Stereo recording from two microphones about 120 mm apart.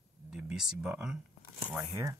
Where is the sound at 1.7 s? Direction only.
20° right (ahead or behind).